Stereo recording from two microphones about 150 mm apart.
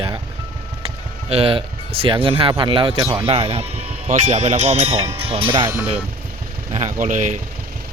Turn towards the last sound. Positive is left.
turn(degrees=-55)  # may be behind; listen again after turning